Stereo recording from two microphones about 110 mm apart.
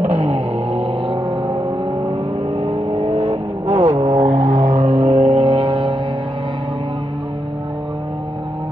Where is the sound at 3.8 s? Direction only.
40° right (ahead or behind).